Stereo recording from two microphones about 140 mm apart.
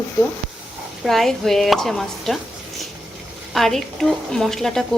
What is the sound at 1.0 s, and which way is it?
Speech, centre (ahead or behind).